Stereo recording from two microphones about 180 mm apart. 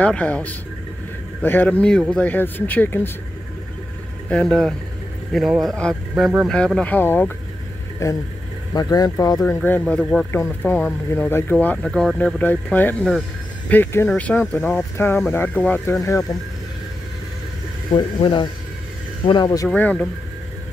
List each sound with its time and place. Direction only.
0.0 s speech: 5° left (ahead or behind)
4.3 s speech: 5° left (ahead or behind); by 9.4 s 20° left (ahead or behind)
9.6 s speech: 10° left (ahead or behind)
17.9 s speech: 25° left (ahead or behind)
19.7 s speech: 10° left (ahead or behind)